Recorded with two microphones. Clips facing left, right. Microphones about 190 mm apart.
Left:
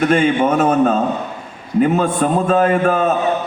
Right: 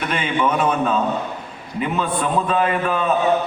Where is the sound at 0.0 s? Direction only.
45° left (ahead or behind).